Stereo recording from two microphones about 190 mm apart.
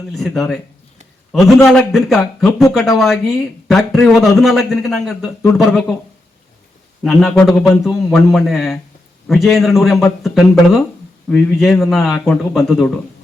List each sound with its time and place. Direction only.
0.1 s a man's voice: centre (ahead or behind)
7.0 s a man's voice: centre (ahead or behind)